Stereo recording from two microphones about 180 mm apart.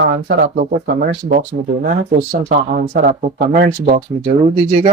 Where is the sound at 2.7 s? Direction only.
50° right (ahead or behind).